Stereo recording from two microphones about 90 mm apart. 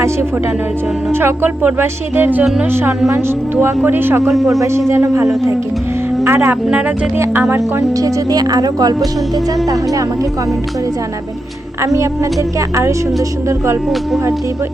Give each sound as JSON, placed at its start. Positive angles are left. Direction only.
{"t": 1.1, "sound": "speech", "side_deg": -25}
{"t": 2.4, "sound": "music", "side_deg": -5}
{"t": 2.6, "sound": "speech", "side_deg": -25}
{"t": 4.2, "sound": "music", "side_deg": 0}
{"t": 4.9, "sound": "a woman's voice", "side_deg": -30}
{"t": 5.2, "sound": "music", "side_deg": -5}
{"t": 6.2, "sound": "speech", "side_deg": -25}
{"t": 7.8, "sound": "speech", "side_deg": -40}
{"t": 11.8, "sound": "a woman's voice", "side_deg": -35}